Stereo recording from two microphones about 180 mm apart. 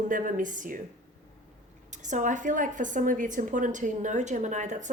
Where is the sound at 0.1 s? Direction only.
45° right (ahead or behind).